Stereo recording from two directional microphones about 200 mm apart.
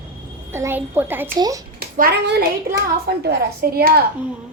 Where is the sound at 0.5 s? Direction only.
10° right (ahead or behind).